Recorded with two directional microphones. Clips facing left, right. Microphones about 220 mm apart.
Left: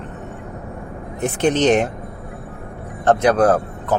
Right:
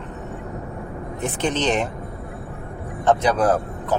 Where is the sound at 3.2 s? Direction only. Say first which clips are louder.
Left 5 dB; 55° left (ahead or behind).